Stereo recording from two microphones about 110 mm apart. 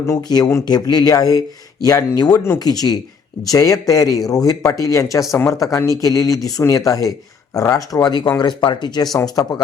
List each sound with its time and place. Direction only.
0.0 s speech: 35° left (ahead or behind)